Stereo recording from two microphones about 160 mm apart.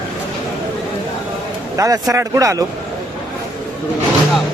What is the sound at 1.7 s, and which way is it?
Speech, 20° right (ahead or behind).